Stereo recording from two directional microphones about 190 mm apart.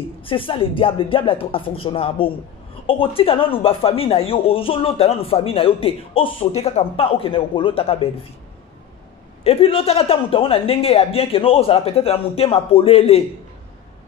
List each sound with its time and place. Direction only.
0.2 s speech: 30° left (ahead or behind)
9.4 s speech: 30° left (ahead or behind)